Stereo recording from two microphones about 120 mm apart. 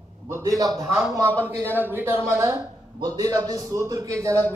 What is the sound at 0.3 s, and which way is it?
Speech, 30° right (ahead or behind).